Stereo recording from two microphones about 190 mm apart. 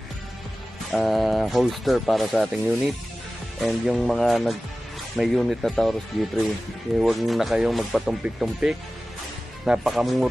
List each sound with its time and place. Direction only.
0.9 s speech: centre (ahead or behind)